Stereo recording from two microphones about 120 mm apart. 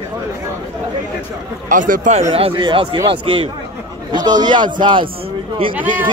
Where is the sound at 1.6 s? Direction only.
90° right.